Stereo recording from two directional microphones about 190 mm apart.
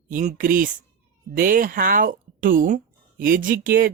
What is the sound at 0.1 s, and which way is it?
Speech, 40° right (ahead or behind).